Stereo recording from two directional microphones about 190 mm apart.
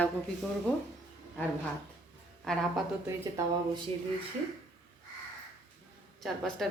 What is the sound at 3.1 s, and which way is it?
Speech, 15° right (ahead or behind).